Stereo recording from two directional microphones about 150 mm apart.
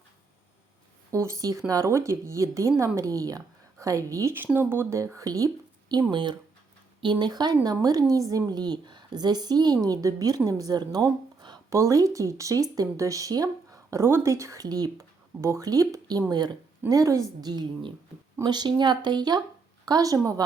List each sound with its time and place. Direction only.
1.1 s a woman's voice: 20° right (ahead or behind)